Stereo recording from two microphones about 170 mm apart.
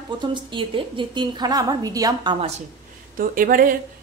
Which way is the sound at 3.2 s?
55° right (ahead or behind).